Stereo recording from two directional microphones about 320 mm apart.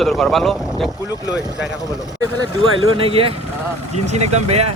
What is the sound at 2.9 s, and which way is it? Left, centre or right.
Speech, centre.